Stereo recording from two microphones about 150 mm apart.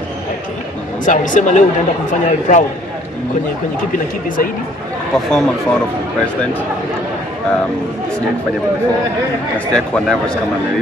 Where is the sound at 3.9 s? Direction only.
60° left (ahead or behind).